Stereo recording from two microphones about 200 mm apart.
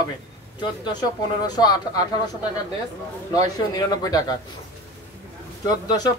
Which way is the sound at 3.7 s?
20° left (ahead or behind).